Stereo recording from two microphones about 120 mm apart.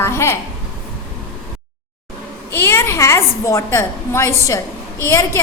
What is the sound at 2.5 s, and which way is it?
A woman's voice, 20° left (ahead or behind).